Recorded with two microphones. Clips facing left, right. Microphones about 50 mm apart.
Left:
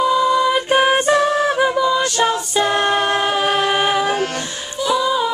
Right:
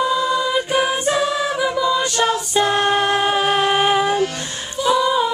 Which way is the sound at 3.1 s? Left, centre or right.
Centre.